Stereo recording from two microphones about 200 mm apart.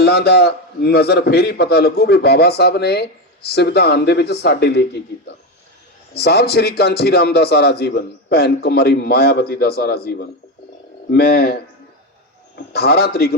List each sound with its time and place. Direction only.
0.0 s a man's voice: 55° left (ahead or behind)
6.1 s a man's voice: 55° left (ahead or behind)
12.7 s a man's voice: 55° left (ahead or behind)